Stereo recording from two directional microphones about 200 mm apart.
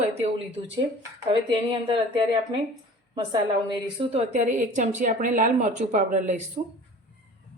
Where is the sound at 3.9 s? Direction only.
35° right (ahead or behind).